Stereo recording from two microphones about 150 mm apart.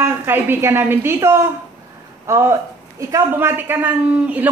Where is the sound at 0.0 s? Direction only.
15° right (ahead or behind).